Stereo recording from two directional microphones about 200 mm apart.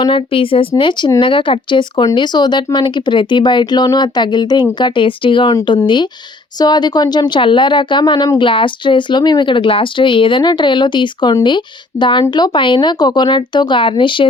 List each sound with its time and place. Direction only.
0.0 s a woman's voice: 25° left (ahead or behind)